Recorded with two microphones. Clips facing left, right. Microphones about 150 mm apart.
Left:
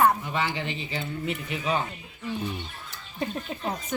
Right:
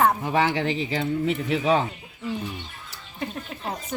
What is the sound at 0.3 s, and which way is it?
Speech, 90° right.